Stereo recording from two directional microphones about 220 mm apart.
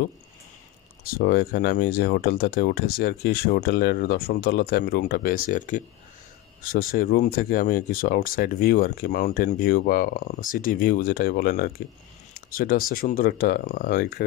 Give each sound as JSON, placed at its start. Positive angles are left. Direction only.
{"t": 1.1, "sound": "speech", "side_deg": 45}